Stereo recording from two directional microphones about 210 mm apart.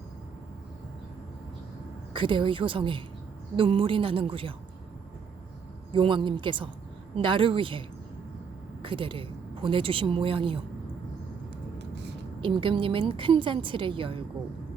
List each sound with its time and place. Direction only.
2.1 s a woman's voice: 25° right (ahead or behind)
5.9 s a woman's voice: 25° right (ahead or behind)
12.4 s a woman's voice: 25° right (ahead or behind)